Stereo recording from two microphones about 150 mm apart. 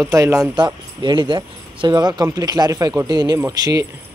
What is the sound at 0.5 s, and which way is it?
Speech, 30° right (ahead or behind).